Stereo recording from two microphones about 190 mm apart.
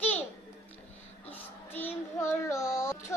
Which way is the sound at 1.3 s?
10° left (ahead or behind).